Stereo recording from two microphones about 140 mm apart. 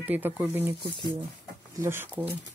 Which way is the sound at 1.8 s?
15° right (ahead or behind).